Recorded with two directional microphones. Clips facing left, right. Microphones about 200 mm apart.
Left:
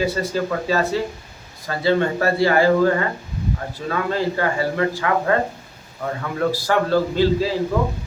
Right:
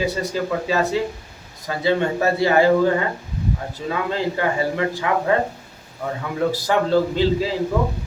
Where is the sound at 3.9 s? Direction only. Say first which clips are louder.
Left 1 dB; 15° right (ahead or behind).